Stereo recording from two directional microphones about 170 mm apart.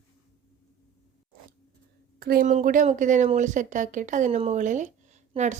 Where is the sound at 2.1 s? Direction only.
60° right (ahead or behind).